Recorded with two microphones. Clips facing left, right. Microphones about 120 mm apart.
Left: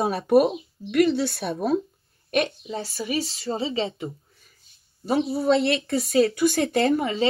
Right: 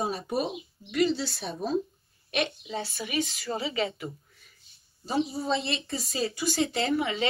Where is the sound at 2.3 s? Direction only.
45° left (ahead or behind); by 4.1 s 25° left (ahead or behind).